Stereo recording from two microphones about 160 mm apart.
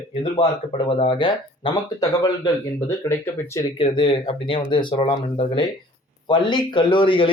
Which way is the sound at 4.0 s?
30° left (ahead or behind).